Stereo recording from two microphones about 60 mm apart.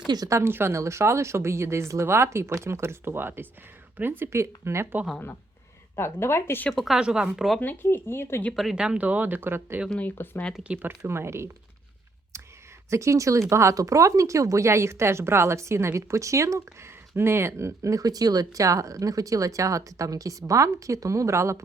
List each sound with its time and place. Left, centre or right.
0.2 s a woman's voice: right
4.3 s speech: right
6.0 s a woman's voice: left
6.7 s speech: centre
7.0 s speech: centre
7.6 s speech: left
8.7 s speech: centre; by 9.8 s right
10.0 s speech: left
10.8 s speech: right
12.9 s speech: right